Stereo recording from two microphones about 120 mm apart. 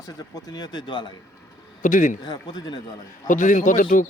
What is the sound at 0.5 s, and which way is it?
Speech, 35° left (ahead or behind).